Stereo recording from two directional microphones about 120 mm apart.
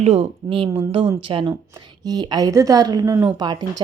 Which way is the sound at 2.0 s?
35° right (ahead or behind).